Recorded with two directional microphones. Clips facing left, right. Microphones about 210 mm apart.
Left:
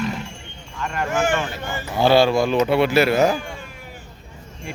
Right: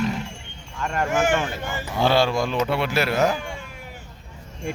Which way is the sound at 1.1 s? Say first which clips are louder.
Even; 20° right (ahead or behind).